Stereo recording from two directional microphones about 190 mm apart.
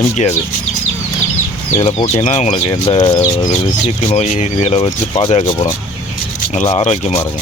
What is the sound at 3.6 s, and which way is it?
Speech, 35° left (ahead or behind).